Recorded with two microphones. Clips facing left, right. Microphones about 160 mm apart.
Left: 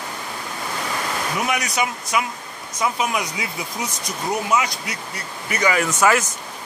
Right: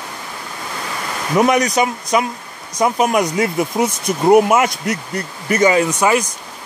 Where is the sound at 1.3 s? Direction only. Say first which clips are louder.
Right 11 dB; 45° right (ahead or behind).